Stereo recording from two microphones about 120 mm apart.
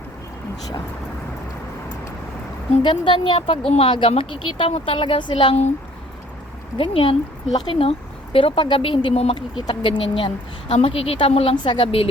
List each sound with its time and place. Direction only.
2.8 s a woman's voice: 40° left (ahead or behind)
6.7 s speech: 50° left (ahead or behind)
9.6 s speech: 40° left (ahead or behind)
11.5 s speech: 40° left (ahead or behind)